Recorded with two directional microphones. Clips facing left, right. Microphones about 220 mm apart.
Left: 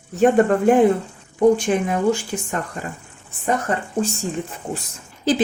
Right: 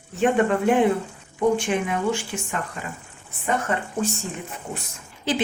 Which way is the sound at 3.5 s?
35° left (ahead or behind).